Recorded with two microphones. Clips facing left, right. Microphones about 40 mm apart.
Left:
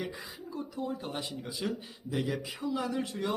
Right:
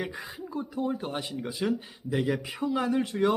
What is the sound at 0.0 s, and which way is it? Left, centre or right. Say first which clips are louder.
Speech: right 4 dB; right.